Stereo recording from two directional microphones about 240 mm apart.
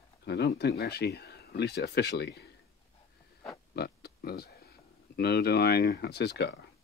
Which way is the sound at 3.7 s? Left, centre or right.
Left.